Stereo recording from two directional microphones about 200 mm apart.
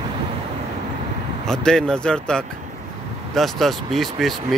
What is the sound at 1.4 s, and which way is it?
Speech, 5° left (ahead or behind).